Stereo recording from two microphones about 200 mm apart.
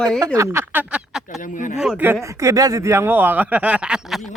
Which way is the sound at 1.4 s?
40° left (ahead or behind).